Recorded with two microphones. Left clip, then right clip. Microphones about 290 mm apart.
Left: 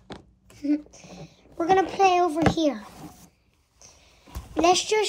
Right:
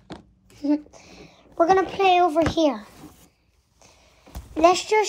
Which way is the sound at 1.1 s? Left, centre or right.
Centre.